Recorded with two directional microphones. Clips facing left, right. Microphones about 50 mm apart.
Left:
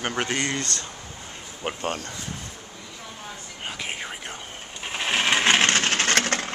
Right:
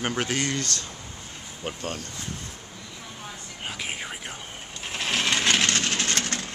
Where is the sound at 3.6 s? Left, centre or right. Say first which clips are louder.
Left 1 dB; centre.